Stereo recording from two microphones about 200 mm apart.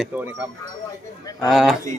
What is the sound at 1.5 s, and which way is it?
Speech, centre (ahead or behind).